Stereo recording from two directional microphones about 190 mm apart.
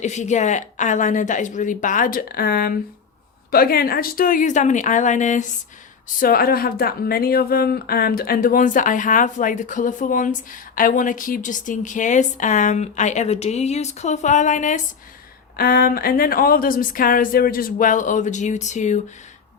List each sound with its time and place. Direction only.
0.0 s a woman's voice: 40° left (ahead or behind)